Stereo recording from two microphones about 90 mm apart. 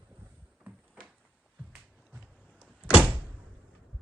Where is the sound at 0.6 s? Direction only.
15° right (ahead or behind).